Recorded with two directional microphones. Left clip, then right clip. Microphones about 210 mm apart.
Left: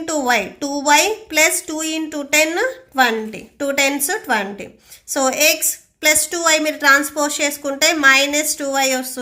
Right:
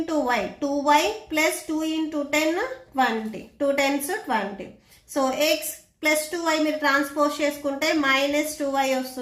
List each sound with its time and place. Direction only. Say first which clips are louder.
0.0 s a woman's voice: left 6 dB; 55° left (ahead or behind)